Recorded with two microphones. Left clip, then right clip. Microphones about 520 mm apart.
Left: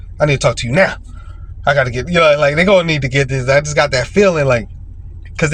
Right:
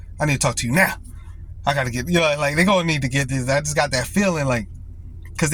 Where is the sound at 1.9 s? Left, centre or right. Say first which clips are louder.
Left 5 dB; centre.